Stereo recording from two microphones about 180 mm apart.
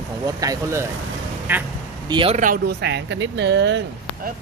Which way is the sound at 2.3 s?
50° right (ahead or behind).